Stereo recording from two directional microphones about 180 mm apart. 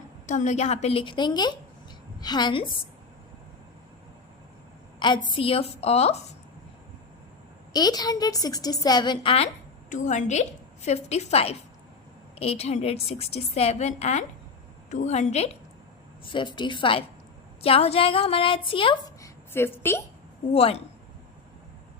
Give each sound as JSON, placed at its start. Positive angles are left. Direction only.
{"t": 0.3, "sound": "a woman's voice", "side_deg": 40}
{"t": 4.9, "sound": "a sound", "side_deg": 25}
{"t": 5.3, "sound": "a woman's voice", "side_deg": 30}
{"t": 7.7, "sound": "a woman's voice", "side_deg": 20}
{"t": 9.9, "sound": "a woman's voice", "side_deg": 45}
{"t": 16.2, "sound": "a woman's voice", "side_deg": 25}
{"t": 19.2, "sound": "a sound", "side_deg": 10}
{"t": 20.5, "sound": "a woman's voice", "side_deg": 35}